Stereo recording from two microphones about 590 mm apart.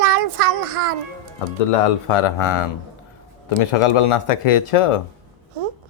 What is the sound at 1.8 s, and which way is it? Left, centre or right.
Speech, left.